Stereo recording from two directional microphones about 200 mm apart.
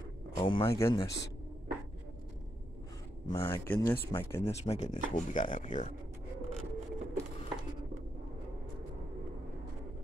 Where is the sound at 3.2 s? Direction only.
15° left (ahead or behind).